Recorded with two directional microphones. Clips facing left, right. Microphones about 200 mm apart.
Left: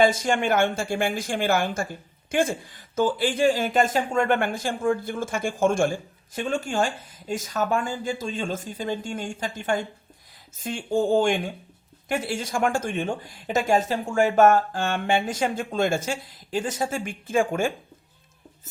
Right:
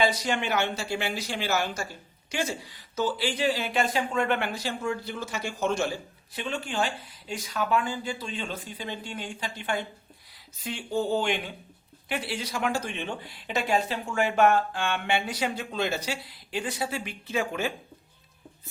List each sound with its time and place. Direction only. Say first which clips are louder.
0.0 s speech: left 5 dB; 50° left (ahead or behind)